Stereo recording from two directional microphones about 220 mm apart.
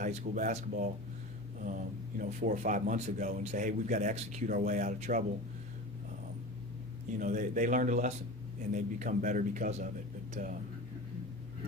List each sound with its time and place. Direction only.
0.0 s a man's voice: 35° right (ahead or behind)
7.1 s a man's voice: 35° right (ahead or behind)